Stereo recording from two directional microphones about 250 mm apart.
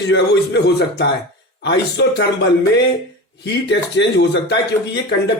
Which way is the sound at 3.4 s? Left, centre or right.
Left.